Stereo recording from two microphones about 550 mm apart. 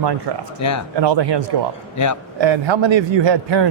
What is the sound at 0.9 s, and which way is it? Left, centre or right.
Speech, right.